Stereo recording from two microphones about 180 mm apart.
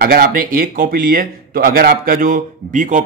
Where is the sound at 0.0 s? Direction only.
55° right (ahead or behind).